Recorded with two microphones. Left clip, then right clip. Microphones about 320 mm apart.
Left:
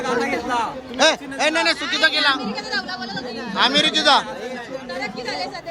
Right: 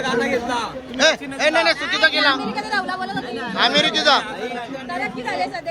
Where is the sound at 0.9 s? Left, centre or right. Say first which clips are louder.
Even; centre.